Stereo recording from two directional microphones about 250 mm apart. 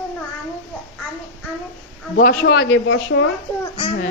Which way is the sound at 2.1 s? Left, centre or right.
Left.